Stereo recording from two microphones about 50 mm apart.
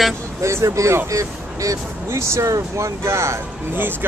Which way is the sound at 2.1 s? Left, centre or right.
Right.